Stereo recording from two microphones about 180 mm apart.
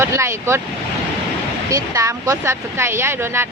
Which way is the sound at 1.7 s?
15° right (ahead or behind).